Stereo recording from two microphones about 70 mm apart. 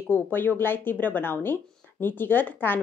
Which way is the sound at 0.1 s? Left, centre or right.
Left.